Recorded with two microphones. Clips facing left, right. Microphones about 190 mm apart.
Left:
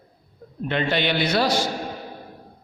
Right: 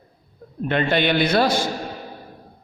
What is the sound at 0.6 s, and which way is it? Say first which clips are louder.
A man's voice: right 3 dB; 50° right (ahead or behind).